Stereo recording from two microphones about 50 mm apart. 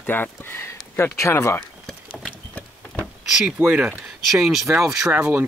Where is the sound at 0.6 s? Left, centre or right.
Left.